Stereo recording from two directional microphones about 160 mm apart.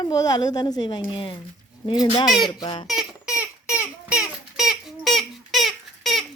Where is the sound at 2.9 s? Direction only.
5° right (ahead or behind).